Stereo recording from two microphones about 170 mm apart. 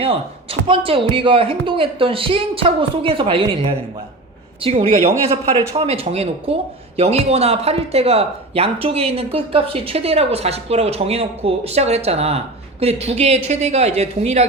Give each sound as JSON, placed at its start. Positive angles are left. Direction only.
{"t": 0.7, "sound": "speech", "side_deg": -30}